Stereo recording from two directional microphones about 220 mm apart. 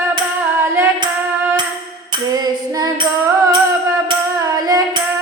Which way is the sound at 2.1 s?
20° right (ahead or behind).